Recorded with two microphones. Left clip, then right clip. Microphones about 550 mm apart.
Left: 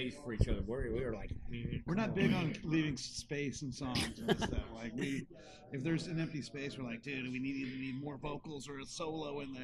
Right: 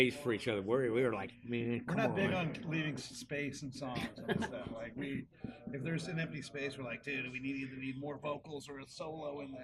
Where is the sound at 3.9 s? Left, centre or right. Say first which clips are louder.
Left 4 dB; left.